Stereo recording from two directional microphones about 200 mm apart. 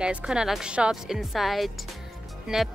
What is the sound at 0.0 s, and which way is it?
Speech, 5° right (ahead or behind).